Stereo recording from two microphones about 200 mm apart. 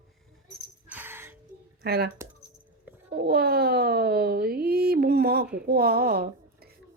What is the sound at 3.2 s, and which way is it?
A woman's voice, 50° right (ahead or behind).